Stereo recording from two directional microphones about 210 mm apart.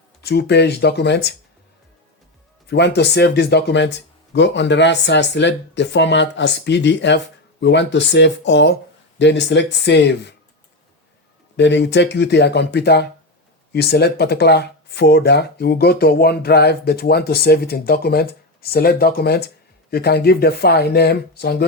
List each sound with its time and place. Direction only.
0.2 s speech: 50° left (ahead or behind)
2.6 s speech: 55° left (ahead or behind)
11.5 s speech: 55° left (ahead or behind)